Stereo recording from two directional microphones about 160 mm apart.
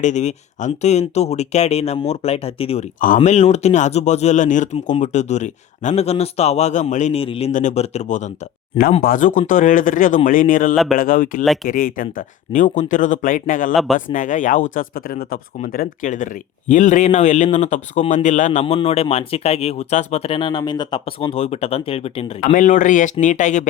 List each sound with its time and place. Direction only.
0.0 s speech: 45° left (ahead or behind)
11.4 s speech: centre (ahead or behind)
11.7 s speech: 60° left (ahead or behind)
18.6 s speech: 35° left (ahead or behind)
22.5 s speech: 55° left (ahead or behind)